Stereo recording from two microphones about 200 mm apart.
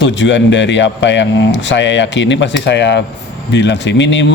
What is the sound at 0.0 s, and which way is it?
Speech, 65° left (ahead or behind).